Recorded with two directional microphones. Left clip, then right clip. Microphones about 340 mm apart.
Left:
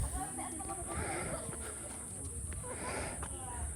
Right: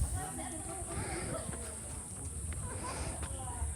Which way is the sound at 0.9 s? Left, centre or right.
Centre.